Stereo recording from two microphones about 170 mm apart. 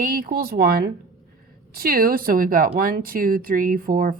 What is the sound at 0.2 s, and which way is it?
Speech, 60° right (ahead or behind).